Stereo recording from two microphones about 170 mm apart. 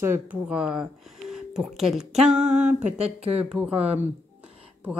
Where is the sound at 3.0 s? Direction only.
40° right (ahead or behind).